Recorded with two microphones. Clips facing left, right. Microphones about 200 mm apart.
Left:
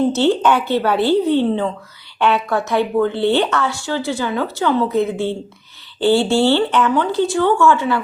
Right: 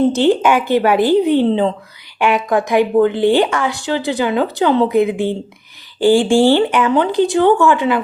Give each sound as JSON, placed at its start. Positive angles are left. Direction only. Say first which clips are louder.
{"t": 0.1, "sound": "speech", "louder": "right 2 dB", "side_deg": -15}